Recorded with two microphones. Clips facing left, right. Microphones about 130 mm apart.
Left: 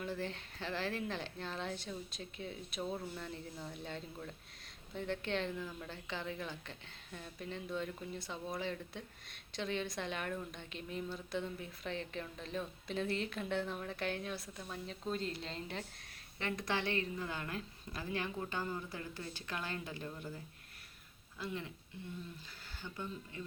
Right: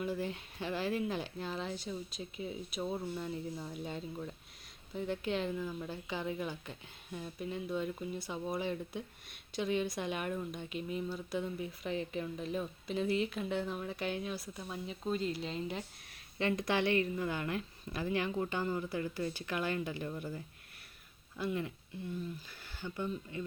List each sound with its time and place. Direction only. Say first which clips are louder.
0.0 s speech: right 4 dB; 10° right (ahead or behind)
16.4 s speech: right 6 dB; 20° right (ahead or behind)
21.3 s speech: right 6 dB; 15° right (ahead or behind)
22.8 s speech: right 6 dB; 10° right (ahead or behind)